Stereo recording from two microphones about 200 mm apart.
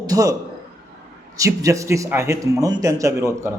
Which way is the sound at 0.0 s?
15° right (ahead or behind).